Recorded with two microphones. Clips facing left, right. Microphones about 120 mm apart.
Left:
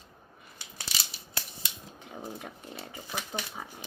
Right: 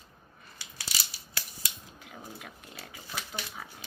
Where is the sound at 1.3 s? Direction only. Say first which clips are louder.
Left 2 dB; 25° left (ahead or behind).